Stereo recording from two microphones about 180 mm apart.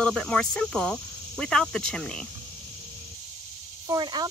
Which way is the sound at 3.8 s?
20° right (ahead or behind).